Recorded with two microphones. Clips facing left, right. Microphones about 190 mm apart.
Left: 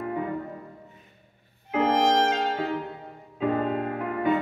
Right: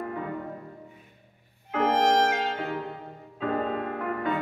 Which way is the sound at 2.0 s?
15° left (ahead or behind).